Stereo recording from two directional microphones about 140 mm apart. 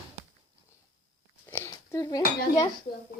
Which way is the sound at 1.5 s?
20° left (ahead or behind).